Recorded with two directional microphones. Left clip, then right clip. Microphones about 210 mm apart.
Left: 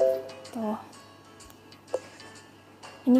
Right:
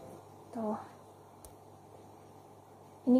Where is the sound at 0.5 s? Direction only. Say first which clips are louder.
Left 4 dB; 25° left (ahead or behind).